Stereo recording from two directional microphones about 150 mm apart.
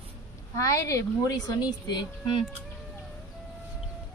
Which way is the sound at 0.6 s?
20° left (ahead or behind).